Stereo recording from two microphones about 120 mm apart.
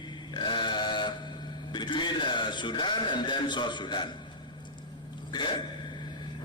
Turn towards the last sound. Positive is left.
turn(degrees=40)  # may be behind; listen again after turning